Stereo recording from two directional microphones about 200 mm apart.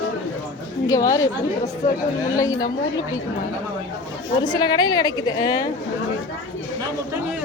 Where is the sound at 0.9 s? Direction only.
15° left (ahead or behind).